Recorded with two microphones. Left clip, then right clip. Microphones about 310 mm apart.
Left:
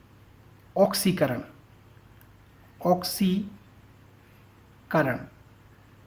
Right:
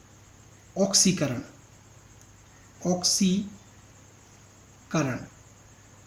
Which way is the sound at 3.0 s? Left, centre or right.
Left.